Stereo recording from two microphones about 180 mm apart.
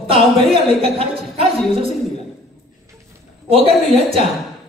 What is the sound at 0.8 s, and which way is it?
A woman's voice, 30° right (ahead or behind).